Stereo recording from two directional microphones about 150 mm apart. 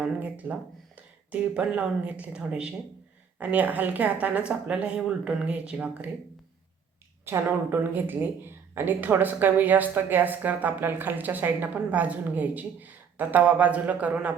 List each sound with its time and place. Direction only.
0.0 s a sound: 10° right (ahead or behind)
0.9 s a woman's voice: 10° right (ahead or behind)
7.3 s a woman's voice: 15° right (ahead or behind)